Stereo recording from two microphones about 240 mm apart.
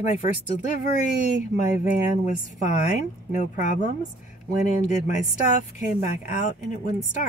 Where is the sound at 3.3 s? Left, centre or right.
Left.